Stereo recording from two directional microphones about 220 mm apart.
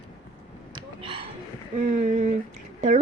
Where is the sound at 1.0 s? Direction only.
25° right (ahead or behind).